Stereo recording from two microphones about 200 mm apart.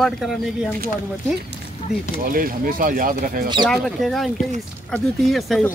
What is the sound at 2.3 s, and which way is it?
Speech, 45° right (ahead or behind).